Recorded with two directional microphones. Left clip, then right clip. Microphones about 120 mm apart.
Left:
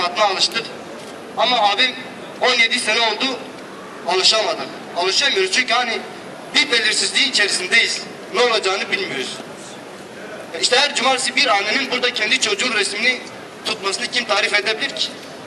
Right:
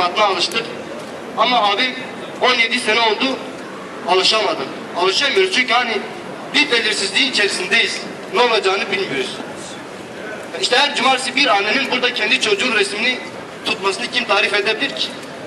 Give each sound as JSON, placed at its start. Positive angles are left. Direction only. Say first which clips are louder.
{"t": 0.0, "sound": "a man's voice", "louder": "right 1 dB", "side_deg": 15}
{"t": 10.6, "sound": "a man's voice", "louder": "right 1 dB", "side_deg": 20}